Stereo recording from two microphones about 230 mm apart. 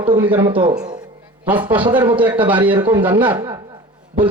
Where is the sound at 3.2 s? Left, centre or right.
Right.